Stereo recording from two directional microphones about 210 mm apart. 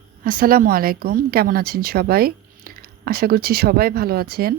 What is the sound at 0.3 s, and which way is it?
Speech, 40° right (ahead or behind).